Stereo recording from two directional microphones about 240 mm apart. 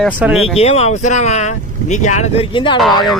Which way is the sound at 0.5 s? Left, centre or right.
Left.